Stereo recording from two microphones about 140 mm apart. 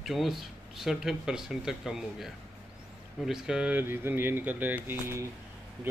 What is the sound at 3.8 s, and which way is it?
Speech, 15° right (ahead or behind).